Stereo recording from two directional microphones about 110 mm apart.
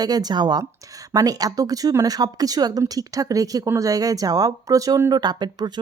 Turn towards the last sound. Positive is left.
turn(degrees=-40)  # may be behind; listen again after turning